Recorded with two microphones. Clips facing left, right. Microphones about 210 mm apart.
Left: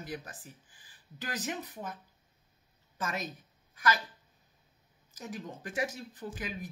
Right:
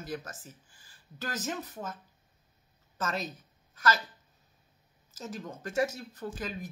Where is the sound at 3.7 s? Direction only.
15° left (ahead or behind).